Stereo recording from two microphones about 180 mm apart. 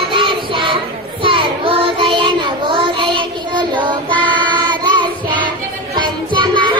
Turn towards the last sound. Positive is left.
turn(degrees=-25)  # may be behind; listen again after turning